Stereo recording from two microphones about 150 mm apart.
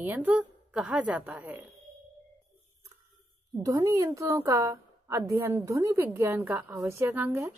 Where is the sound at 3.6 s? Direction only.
20° right (ahead or behind).